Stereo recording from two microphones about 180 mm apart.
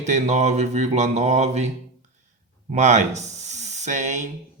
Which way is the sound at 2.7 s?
40° right (ahead or behind).